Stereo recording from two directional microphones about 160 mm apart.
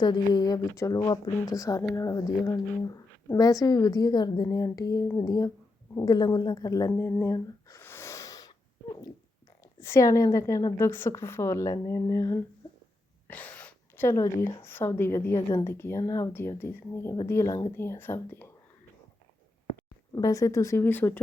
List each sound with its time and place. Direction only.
0.0 s speech: 25° left (ahead or behind)
9.8 s speech: 20° left (ahead or behind)
20.1 s speech: 20° left (ahead or behind)